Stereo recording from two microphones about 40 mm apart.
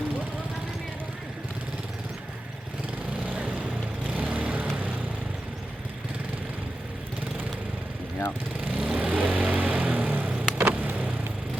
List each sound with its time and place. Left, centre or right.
3.2 s vehicle: right
8.6 s vehicle: right